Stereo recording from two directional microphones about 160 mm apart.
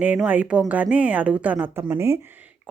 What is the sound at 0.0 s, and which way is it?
Speech, 10° right (ahead or behind).